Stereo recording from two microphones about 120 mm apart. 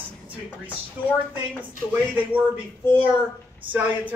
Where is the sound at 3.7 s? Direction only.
15° right (ahead or behind).